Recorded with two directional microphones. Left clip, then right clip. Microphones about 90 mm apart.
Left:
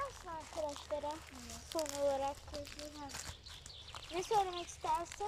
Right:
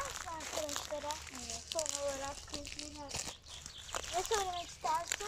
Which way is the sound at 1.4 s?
35° right (ahead or behind).